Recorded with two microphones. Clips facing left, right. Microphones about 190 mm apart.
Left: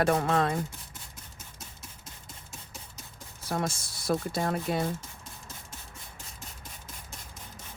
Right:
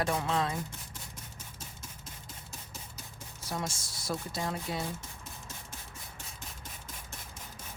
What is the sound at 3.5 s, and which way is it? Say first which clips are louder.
Speech: left 6 dB; 55° left (ahead or behind).